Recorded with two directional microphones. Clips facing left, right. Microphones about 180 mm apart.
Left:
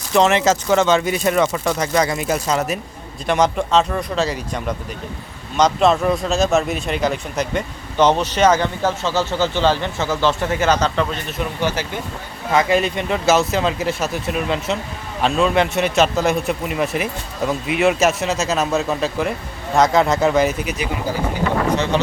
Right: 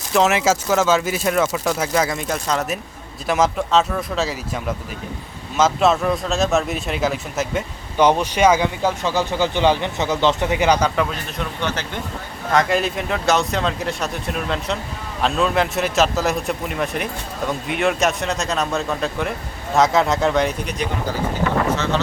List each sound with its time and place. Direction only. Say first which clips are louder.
0.1 s a man's voice: left 2 dB; 5° right (ahead or behind)
11.3 s a man's voice: left 4 dB; 10° left (ahead or behind)
21.9 s a man's voice: left 3 dB; 15° left (ahead or behind)